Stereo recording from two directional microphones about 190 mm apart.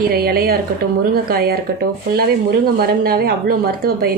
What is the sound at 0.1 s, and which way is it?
Speech, 55° right (ahead or behind).